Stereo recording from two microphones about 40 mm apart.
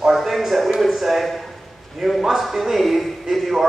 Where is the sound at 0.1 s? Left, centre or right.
Centre.